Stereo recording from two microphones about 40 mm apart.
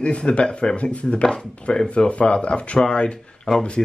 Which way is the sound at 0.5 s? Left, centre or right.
Centre.